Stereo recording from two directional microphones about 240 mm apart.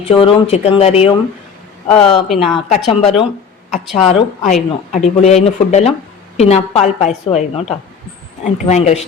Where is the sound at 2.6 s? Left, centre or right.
Left.